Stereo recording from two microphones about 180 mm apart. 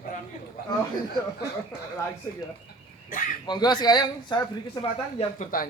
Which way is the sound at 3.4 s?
25° left (ahead or behind).